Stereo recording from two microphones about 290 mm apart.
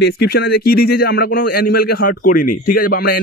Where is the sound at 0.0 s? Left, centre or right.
Left.